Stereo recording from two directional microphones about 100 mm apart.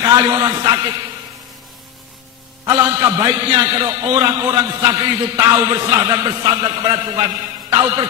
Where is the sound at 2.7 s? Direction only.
35° right (ahead or behind).